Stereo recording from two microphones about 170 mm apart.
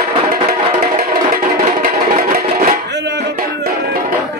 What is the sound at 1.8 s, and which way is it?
Music, 55° right (ahead or behind).